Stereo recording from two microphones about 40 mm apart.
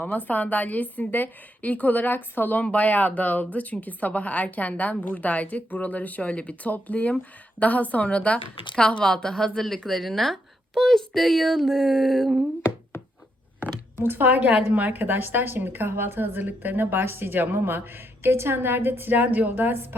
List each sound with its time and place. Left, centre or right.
0.3 s a woman's voice: left
2.7 s a woman's voice: left
9.1 s speech: centre
14.2 s a woman's voice: right
15.0 s a woman's voice: right
19.2 s a woman's voice: right